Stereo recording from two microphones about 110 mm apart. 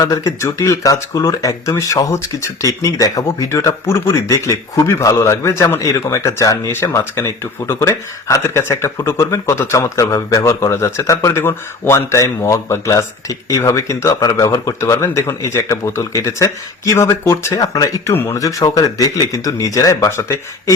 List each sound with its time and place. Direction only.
0.0 s speech: 30° left (ahead or behind)
18.1 s speech: 20° left (ahead or behind)
18.3 s speech: 30° left (ahead or behind)